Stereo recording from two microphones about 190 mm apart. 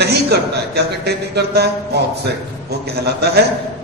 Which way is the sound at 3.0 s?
55° right (ahead or behind).